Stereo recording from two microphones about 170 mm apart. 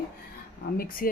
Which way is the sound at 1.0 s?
55° left (ahead or behind).